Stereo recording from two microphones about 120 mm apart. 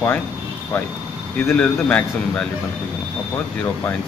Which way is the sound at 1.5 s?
10° left (ahead or behind).